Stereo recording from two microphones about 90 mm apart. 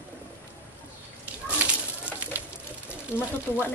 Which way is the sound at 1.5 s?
15° right (ahead or behind).